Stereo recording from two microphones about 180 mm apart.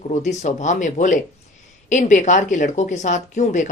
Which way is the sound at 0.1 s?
40° left (ahead or behind).